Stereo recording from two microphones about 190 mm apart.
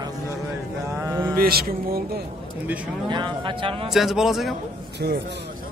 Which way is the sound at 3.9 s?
Centre (ahead or behind).